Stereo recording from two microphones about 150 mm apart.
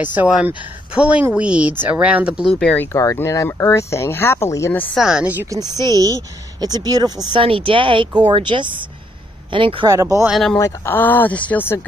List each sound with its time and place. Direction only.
0.0 s a woman's voice: 10° right (ahead or behind)
2.6 s speech: 10° left (ahead or behind)
4.9 s a woman's voice: 5° right (ahead or behind); by 9.9 s 35° right (ahead or behind)
10.2 s speech: centre (ahead or behind)
10.6 s speech: 15° left (ahead or behind)